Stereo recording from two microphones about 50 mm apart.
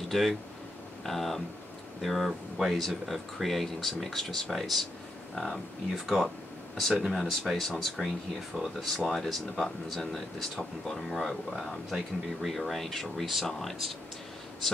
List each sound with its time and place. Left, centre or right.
0.1 s speech: centre